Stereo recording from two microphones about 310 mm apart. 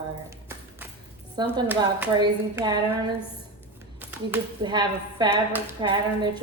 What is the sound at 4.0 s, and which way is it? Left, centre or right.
Speech, centre.